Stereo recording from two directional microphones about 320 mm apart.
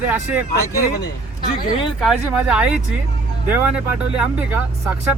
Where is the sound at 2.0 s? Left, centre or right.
Centre.